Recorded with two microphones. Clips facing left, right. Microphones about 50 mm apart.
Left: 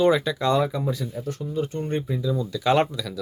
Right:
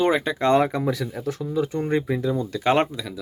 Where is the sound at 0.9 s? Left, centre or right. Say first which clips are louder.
Right 3 dB; right.